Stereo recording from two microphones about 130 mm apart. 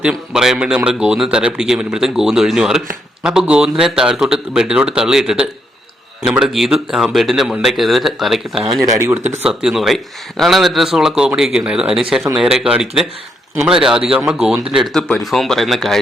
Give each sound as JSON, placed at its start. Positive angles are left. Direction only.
{"t": 0.0, "sound": "speech", "side_deg": -5}
{"t": 8.6, "sound": "speech", "side_deg": -30}
{"t": 9.5, "sound": "speech", "side_deg": -5}